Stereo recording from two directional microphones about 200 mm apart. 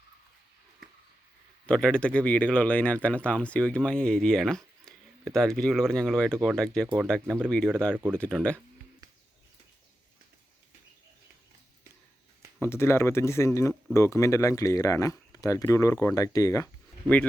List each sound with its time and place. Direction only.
1.6 s speech: 5° left (ahead or behind)
7.9 s speech: 10° right (ahead or behind)
8.2 s speech: 5° left (ahead or behind)
12.5 s speech: 10° left (ahead or behind)